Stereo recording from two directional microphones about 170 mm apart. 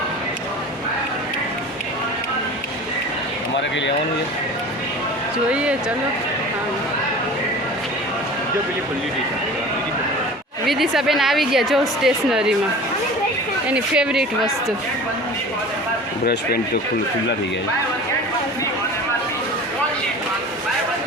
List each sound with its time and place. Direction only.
5.5 s speech: 5° right (ahead or behind)
10.7 s a woman's voice: centre (ahead or behind)
13.7 s a woman's voice: 5° right (ahead or behind)
16.2 s speech: 70° left (ahead or behind)